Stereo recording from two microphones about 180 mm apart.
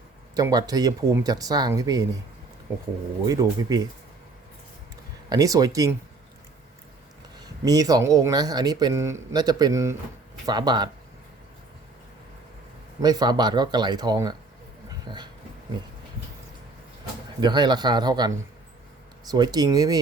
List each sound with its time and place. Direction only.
0.3 s speech: 20° right (ahead or behind)
3.2 s speech: 20° right (ahead or behind)
5.3 s speech: 20° right (ahead or behind)
7.4 s speech: 20° right (ahead or behind)
13.0 s speech: 20° right (ahead or behind)
15.0 s train: 25° right (ahead or behind)
17.4 s speech: 25° right (ahead or behind)
19.3 s speech: 20° right (ahead or behind)